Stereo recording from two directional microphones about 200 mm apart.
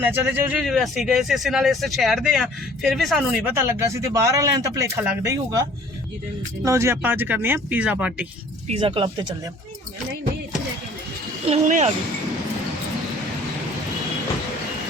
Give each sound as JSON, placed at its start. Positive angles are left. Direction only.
{"t": 0.0, "sound": "speech", "side_deg": -10}
{"t": 3.5, "sound": "speech", "side_deg": -15}
{"t": 6.7, "sound": "speech", "side_deg": -15}
{"t": 8.6, "sound": "speech", "side_deg": -25}
{"t": 11.4, "sound": "speech", "side_deg": -35}